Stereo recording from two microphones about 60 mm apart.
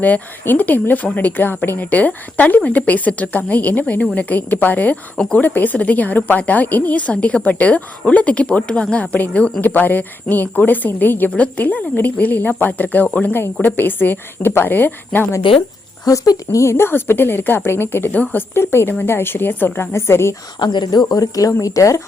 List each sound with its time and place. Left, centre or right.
0.0 s a woman's voice: left
13.1 s speech: centre
13.3 s a woman's voice: left
16.0 s a woman's voice: left
18.1 s a woman's voice: left
18.5 s a woman's voice: left
19.9 s speech: left
21.1 s speech: left